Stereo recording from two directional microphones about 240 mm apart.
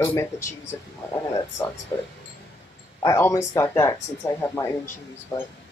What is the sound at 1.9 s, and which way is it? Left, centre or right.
Speech, centre.